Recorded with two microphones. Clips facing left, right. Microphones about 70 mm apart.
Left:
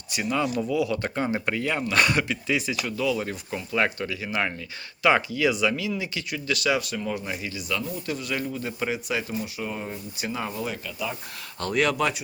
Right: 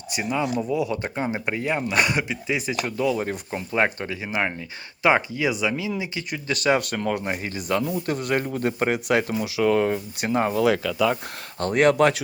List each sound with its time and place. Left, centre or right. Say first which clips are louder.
0.1 s speech: right 1 dB; right
0.7 s speech: right 1 dB; right
1.0 s speech: even; centre
2.6 s speech: right 2 dB; right
6.8 s speech: right 4 dB; right
7.4 s speech: right 5 dB; right
10.6 s speech: right 11 dB; right
11.6 s speech: right 6 dB; right